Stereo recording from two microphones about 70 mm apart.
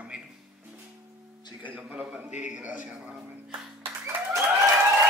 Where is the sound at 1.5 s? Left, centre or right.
Right.